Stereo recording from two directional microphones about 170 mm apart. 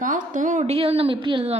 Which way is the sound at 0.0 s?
50° right (ahead or behind).